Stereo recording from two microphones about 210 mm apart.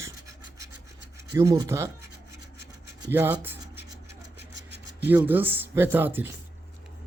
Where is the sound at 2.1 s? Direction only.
50° right (ahead or behind).